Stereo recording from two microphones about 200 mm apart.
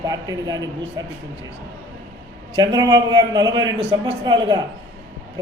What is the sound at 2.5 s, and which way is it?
A man's voice, 20° right (ahead or behind).